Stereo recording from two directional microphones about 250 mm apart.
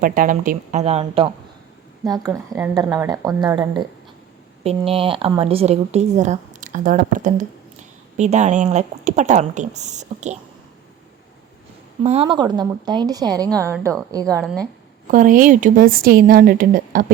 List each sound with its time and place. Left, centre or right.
0.0 s a woman's voice: right
12.0 s a woman's voice: right
15.0 s a woman's voice: right